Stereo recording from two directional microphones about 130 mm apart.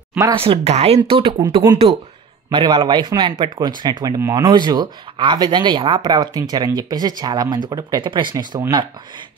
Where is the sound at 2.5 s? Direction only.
40° right (ahead or behind).